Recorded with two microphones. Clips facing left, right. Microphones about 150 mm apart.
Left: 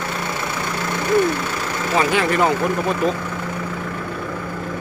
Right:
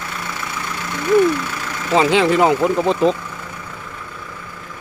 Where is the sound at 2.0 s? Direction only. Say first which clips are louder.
Right 4 dB; 20° right (ahead or behind).